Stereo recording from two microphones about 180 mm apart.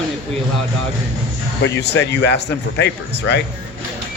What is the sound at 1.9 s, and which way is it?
Speech, 70° left (ahead or behind).